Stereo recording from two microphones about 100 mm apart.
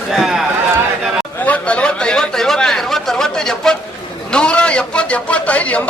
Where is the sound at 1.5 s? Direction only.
10° left (ahead or behind).